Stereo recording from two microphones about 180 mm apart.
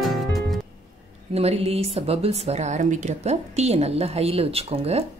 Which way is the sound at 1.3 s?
35° right (ahead or behind).